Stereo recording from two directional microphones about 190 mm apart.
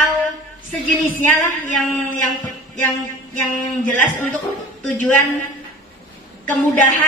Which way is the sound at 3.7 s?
10° left (ahead or behind).